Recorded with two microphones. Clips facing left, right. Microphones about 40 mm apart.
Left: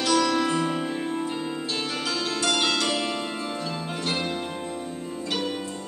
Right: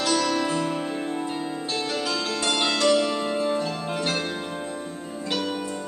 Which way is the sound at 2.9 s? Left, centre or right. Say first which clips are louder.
Right 6 dB; left.